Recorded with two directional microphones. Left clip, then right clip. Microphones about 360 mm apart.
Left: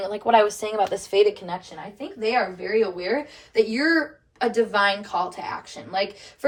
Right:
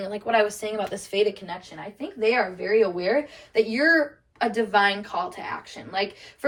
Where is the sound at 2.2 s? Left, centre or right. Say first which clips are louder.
Right 1 dB; centre.